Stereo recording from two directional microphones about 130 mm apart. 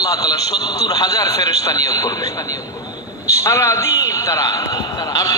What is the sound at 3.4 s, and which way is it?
A man's voice, 20° left (ahead or behind).